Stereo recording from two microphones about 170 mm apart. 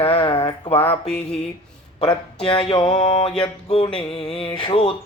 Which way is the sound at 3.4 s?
30° left (ahead or behind).